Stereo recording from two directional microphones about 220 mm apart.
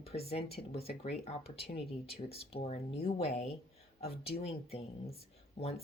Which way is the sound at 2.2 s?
25° left (ahead or behind).